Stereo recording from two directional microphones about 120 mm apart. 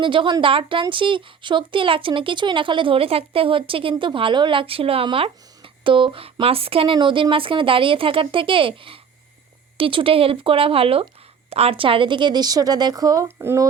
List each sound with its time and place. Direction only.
0.0 s speech: 45° right (ahead or behind)
13.2 s speech: 20° right (ahead or behind)